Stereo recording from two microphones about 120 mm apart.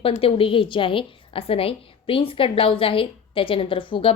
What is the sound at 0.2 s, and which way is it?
A woman's voice, 50° left (ahead or behind).